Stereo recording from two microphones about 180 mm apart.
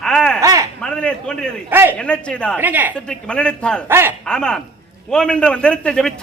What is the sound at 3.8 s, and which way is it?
Speech, 10° right (ahead or behind).